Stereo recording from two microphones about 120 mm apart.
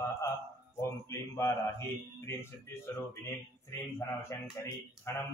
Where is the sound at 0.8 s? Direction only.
20° left (ahead or behind).